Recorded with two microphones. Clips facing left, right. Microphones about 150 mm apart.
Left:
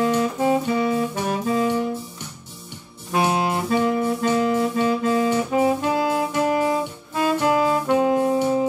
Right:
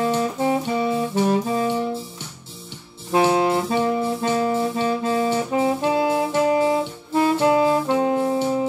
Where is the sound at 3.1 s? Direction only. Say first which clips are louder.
Right 3 dB; 30° right (ahead or behind).